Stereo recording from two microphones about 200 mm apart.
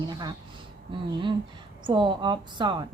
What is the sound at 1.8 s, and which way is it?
A woman's voice, 25° right (ahead or behind).